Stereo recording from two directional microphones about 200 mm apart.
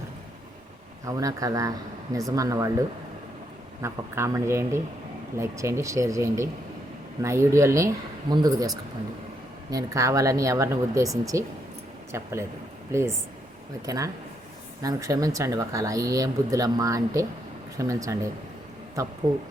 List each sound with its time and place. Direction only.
1.0 s speech: 15° right (ahead or behind)